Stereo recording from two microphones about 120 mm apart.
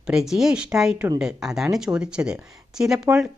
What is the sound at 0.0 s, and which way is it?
A woman's voice, 5° right (ahead or behind).